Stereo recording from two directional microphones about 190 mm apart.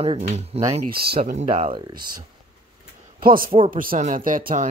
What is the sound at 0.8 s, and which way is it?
Speech, 50° right (ahead or behind).